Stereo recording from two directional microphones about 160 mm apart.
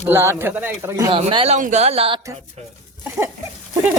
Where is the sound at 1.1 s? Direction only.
35° right (ahead or behind).